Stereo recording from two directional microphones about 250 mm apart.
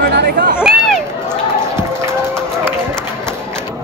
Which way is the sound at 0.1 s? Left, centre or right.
Right.